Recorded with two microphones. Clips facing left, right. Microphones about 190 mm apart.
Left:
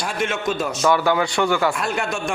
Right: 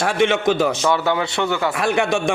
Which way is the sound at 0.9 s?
25° right (ahead or behind).